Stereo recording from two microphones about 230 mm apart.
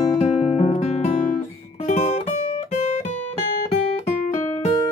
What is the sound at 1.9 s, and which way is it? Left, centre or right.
Music, left.